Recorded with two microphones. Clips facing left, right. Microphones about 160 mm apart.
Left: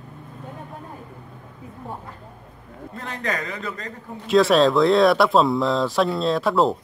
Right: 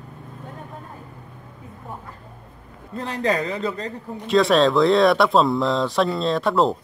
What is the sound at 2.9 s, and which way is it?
Speech, 35° right (ahead or behind).